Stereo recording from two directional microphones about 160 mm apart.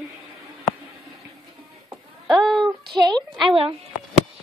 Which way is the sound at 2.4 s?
Centre (ahead or behind).